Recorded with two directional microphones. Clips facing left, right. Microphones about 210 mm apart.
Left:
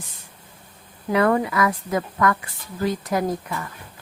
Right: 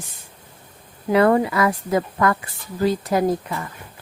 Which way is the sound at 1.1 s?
25° right (ahead or behind).